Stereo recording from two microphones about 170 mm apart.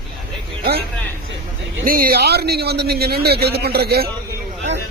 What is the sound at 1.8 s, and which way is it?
A man's voice, 60° right (ahead or behind).